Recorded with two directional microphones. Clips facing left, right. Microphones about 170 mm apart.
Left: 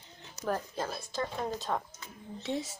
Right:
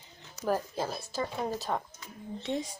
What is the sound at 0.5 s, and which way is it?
Speech, 10° right (ahead or behind).